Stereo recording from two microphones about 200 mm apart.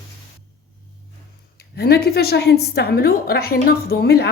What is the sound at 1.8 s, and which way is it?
A woman's voice, 50° left (ahead or behind).